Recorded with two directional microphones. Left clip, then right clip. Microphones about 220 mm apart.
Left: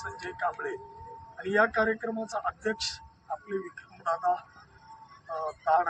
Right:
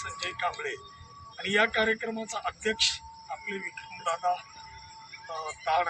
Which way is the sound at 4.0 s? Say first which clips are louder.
Left 1 dB; 15° right (ahead or behind).